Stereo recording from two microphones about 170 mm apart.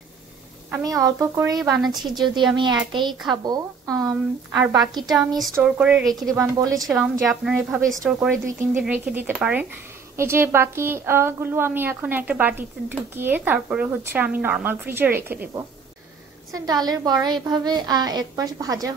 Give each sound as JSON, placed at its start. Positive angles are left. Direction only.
{"t": 0.7, "sound": "a woman's voice", "side_deg": -20}
{"t": 1.8, "sound": "a woman's voice", "side_deg": 0}
{"t": 2.3, "sound": "a woman's voice", "side_deg": -25}
{"t": 5.4, "sound": "a woman's voice", "side_deg": -5}
{"t": 6.3, "sound": "a woman's voice", "side_deg": -20}
{"t": 6.9, "sound": "a woman's voice", "side_deg": 0}